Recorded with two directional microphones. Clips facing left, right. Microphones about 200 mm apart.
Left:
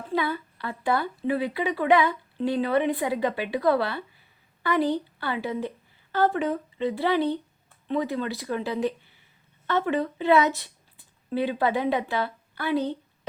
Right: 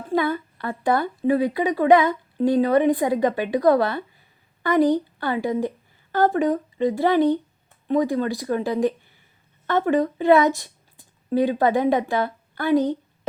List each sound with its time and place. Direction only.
0.1 s a woman's voice: 50° right (ahead or behind)